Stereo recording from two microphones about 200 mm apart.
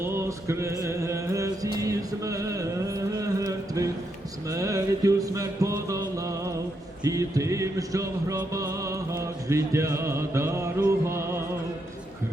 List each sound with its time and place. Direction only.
0.0 s music: 15° right (ahead or behind)